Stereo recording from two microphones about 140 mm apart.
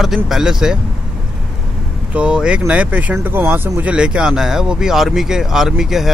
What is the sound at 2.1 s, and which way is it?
Speech, 5° right (ahead or behind).